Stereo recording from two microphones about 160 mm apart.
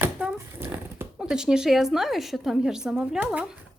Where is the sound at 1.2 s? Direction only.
5° right (ahead or behind).